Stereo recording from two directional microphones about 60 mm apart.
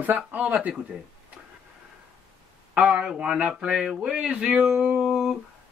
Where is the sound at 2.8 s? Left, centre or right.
Centre.